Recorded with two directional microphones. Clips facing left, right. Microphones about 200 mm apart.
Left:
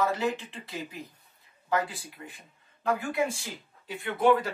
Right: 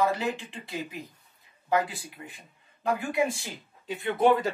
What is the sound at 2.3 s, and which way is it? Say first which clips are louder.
Speech: right 1 dB; 15° right (ahead or behind).